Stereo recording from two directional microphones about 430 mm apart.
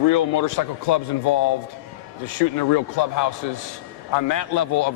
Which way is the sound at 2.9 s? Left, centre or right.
Left.